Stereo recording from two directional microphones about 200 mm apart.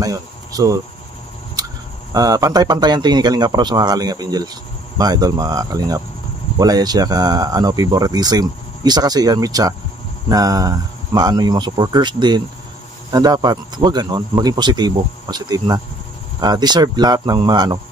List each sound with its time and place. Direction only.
0.0 s speech: 20° right (ahead or behind)
2.1 s speech: 20° right (ahead or behind)